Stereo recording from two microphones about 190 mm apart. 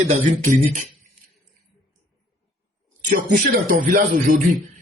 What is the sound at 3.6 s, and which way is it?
Speech, 40° right (ahead or behind).